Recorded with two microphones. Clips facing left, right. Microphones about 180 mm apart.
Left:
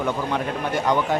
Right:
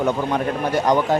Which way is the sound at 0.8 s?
40° right (ahead or behind).